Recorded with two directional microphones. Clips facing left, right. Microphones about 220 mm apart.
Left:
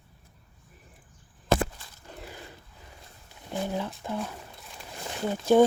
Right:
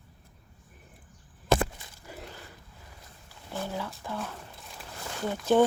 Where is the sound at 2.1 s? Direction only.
10° right (ahead or behind).